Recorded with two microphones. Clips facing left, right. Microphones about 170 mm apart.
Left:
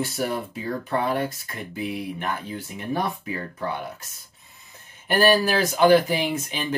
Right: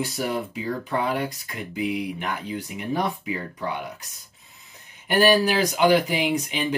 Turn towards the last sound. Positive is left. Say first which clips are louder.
# right 3 dB
turn(degrees=-15)  # may be behind; listen again after turning